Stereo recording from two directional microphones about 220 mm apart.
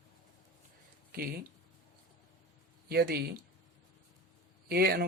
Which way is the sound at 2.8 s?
45° right (ahead or behind).